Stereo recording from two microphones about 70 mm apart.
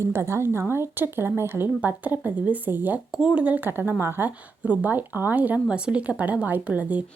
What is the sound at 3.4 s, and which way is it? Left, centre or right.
Speech, right.